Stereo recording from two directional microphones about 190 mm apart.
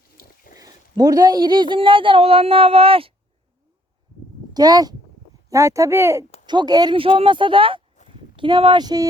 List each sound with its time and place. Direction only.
0.5 s a woman's voice: 20° right (ahead or behind)
4.5 s a woman's voice: 20° right (ahead or behind)